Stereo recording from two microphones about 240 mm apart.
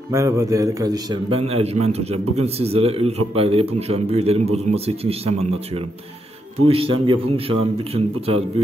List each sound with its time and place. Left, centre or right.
0.1 s a man's voice: centre